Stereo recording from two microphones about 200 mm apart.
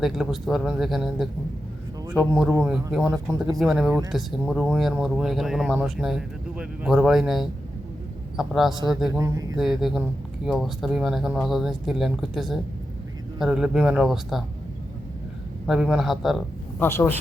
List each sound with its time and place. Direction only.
0.0 s a man's voice: centre (ahead or behind)
9.1 s a man's voice: 15° right (ahead or behind)
9.6 s speech: centre (ahead or behind)
15.6 s speech: 5° right (ahead or behind)
16.8 s speech: 10° left (ahead or behind)